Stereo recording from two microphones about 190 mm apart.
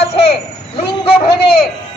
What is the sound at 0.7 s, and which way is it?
Speech, 30° left (ahead or behind).